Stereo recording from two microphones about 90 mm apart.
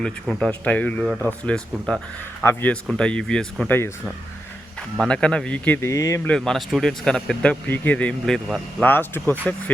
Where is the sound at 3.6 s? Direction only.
20° left (ahead or behind).